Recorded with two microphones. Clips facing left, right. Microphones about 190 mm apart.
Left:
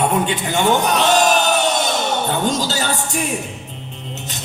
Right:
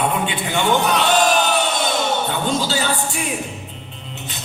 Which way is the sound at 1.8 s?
45° left (ahead or behind).